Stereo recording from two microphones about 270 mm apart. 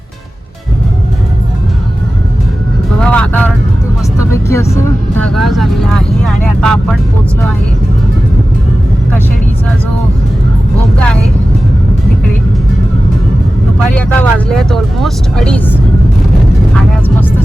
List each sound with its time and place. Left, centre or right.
3.0 s vehicle: centre
5.3 s speech: centre
13.7 s speech: centre